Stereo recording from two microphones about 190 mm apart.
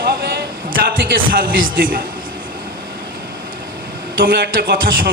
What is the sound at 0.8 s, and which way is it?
A man's voice, 55° right (ahead or behind).